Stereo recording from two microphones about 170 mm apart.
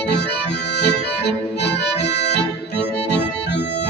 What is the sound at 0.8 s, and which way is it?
Music, 75° left (ahead or behind).